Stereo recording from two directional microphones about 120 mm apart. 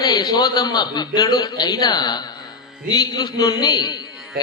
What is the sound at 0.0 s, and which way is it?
A man's voice, 35° left (ahead or behind).